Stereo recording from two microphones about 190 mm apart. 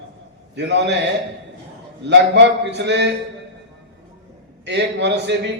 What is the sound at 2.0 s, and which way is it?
A man's voice, 65° right (ahead or behind).